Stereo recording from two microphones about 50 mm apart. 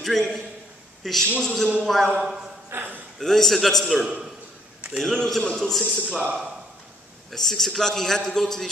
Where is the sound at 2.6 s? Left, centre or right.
Right.